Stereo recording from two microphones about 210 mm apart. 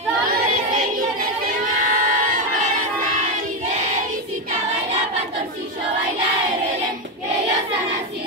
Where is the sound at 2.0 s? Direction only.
40° right (ahead or behind).